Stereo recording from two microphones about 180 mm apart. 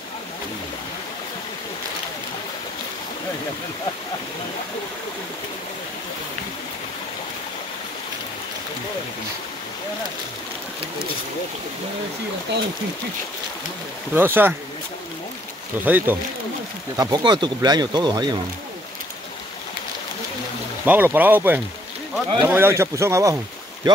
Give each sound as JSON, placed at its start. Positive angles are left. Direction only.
{"t": 14.1, "sound": "speech", "side_deg": -10}
{"t": 15.8, "sound": "speech", "side_deg": -10}
{"t": 16.9, "sound": "speech", "side_deg": -20}
{"t": 20.8, "sound": "speech", "side_deg": -10}